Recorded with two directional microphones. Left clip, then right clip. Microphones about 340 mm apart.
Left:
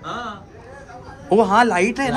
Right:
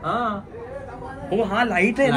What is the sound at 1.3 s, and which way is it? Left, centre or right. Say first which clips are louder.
Speech: left 6 dB; centre.